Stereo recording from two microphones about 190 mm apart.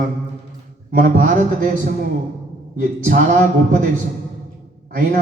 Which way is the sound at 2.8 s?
40° right (ahead or behind).